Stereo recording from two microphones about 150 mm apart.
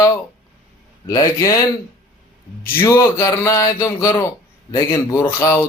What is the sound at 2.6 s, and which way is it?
A man's voice, 20° left (ahead or behind).